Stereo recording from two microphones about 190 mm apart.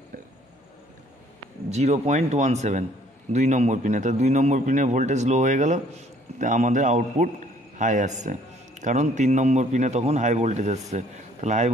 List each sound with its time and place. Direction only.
1.7 s a man's voice: 35° right (ahead or behind)